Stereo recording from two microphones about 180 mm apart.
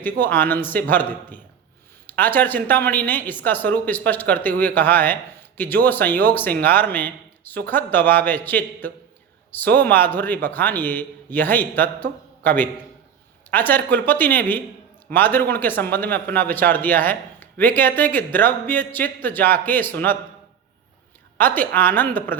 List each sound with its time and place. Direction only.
0.0 s a man's voice: 10° left (ahead or behind)
21.3 s a man's voice: 10° left (ahead or behind)